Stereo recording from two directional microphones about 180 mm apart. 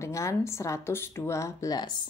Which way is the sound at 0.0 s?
15° left (ahead or behind).